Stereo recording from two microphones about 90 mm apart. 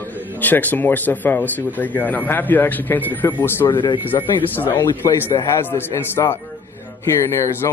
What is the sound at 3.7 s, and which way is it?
Speech, 60° left (ahead or behind).